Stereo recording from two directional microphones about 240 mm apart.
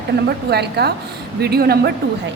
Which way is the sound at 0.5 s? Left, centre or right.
Right.